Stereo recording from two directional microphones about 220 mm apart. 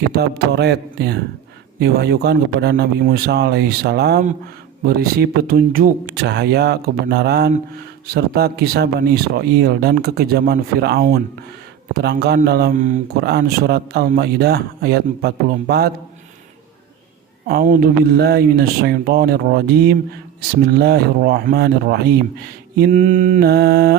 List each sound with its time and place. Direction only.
0.1 s speech: 50° right (ahead or behind)
17.5 s speech: 40° right (ahead or behind)